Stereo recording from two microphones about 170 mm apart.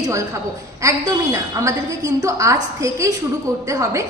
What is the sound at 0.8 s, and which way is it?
A woman's voice, 20° right (ahead or behind).